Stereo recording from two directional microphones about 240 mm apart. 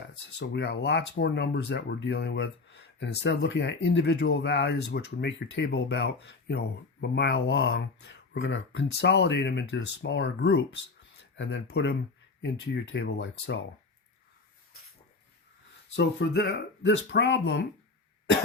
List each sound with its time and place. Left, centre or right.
0.3 s speech: left
16.0 s speech: left